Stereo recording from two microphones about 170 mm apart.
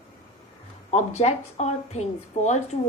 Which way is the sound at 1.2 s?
40° left (ahead or behind).